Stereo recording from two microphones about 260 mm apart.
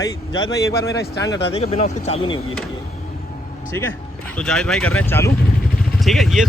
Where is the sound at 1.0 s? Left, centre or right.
Left.